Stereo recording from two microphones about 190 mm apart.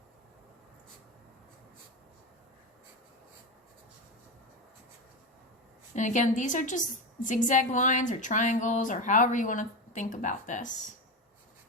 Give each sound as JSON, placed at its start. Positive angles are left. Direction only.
{"t": 5.9, "sound": "a woman's voice", "side_deg": 40}